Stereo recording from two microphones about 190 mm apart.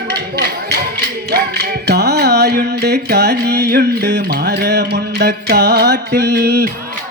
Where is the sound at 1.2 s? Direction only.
60° right (ahead or behind).